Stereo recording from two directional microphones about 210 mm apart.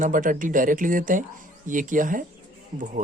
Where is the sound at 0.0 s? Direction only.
40° right (ahead or behind).